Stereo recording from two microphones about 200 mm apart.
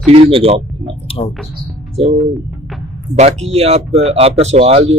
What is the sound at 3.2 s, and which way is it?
Speech, 30° right (ahead or behind).